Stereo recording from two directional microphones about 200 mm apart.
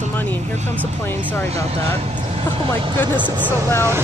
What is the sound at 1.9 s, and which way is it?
Speech, 30° right (ahead or behind).